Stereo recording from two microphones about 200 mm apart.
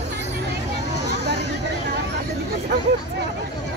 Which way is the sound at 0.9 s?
60° left (ahead or behind).